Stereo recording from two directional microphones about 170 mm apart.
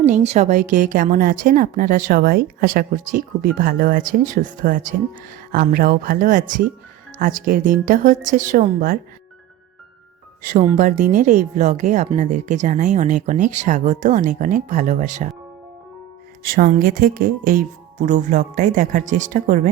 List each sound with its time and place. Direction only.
0.0 s a woman's voice: 40° right (ahead or behind)
10.8 s a woman's voice: 50° right (ahead or behind)
16.4 s a woman's voice: 55° right (ahead or behind)